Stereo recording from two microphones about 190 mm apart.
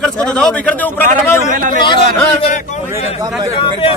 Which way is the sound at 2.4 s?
40° left (ahead or behind).